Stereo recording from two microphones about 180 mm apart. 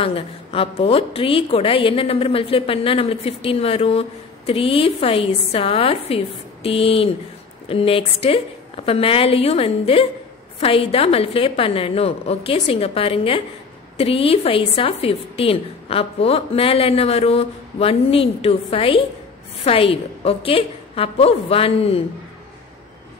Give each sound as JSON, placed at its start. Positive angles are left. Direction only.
{"t": 0.0, "sound": "a woman's voice", "side_deg": 30}